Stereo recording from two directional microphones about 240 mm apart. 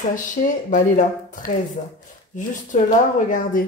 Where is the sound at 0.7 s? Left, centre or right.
Left.